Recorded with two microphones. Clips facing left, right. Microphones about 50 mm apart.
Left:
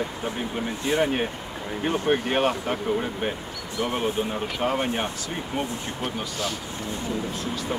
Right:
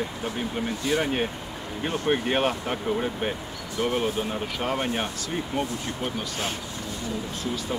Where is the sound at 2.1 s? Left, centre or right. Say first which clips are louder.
Even; centre.